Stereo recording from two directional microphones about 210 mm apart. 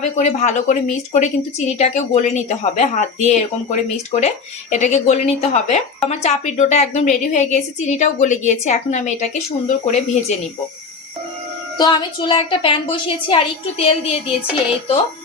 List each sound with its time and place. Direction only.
0.0 s a woman's voice: 35° left (ahead or behind)
11.8 s a woman's voice: 20° left (ahead or behind)